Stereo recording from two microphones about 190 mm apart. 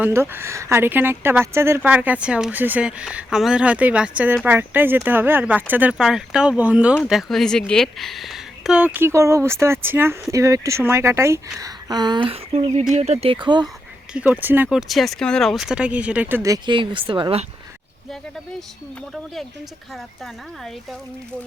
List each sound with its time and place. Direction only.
0.0 s speech: 10° right (ahead or behind)
14.1 s speech: 10° right (ahead or behind); by 17.4 s 25° right (ahead or behind)